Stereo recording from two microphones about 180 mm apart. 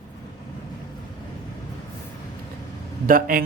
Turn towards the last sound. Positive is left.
turn(degrees=-50)  # may be behind; listen again after turning